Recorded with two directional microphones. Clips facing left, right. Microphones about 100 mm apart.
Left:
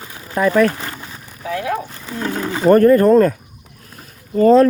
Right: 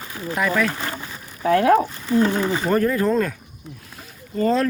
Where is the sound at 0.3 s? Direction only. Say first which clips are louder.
Left 7 dB; 40° left (ahead or behind).